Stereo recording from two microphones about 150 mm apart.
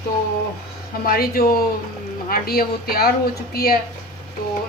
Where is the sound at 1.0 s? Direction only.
80° left.